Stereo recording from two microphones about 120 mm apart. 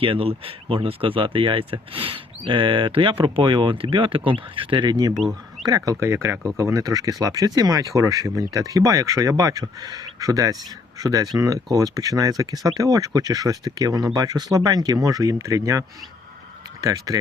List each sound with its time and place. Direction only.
0.0 s speech: 50° right (ahead or behind)
5.1 s speech: centre (ahead or behind)
5.6 s speech: 30° right (ahead or behind)
16.8 s speech: 30° right (ahead or behind)